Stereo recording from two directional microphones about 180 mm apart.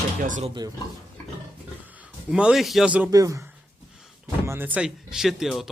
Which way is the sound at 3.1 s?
20° right (ahead or behind).